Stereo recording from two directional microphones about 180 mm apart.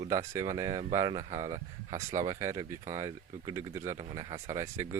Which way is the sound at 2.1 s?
20° right (ahead or behind).